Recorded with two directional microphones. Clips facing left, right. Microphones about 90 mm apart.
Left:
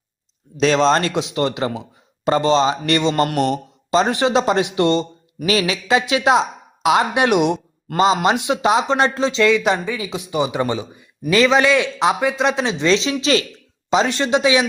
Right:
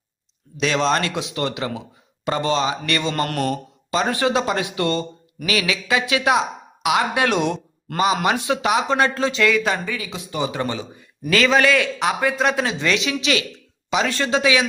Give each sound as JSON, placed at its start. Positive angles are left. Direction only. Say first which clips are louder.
{"t": 0.5, "sound": "speech", "louder": "left 5 dB", "side_deg": 35}
{"t": 3.2, "sound": "speech", "louder": "left 4 dB", "side_deg": 15}
{"t": 3.9, "sound": "speech", "louder": "left 4 dB", "side_deg": 25}
{"t": 7.9, "sound": "speech", "louder": "left 4 dB", "side_deg": 25}